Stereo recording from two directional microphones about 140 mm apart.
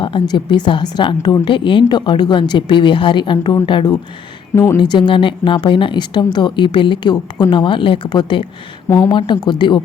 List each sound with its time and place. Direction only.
0.0 s a woman's voice: 35° left (ahead or behind)
4.5 s a woman's voice: 20° left (ahead or behind)
4.8 s a woman's voice: 35° left (ahead or behind)